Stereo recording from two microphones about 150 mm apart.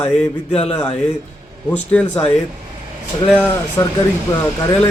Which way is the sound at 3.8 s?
20° left (ahead or behind).